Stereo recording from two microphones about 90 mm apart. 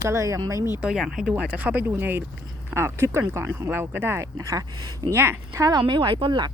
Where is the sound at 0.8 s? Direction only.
5° right (ahead or behind); by 4.3 s 25° right (ahead or behind).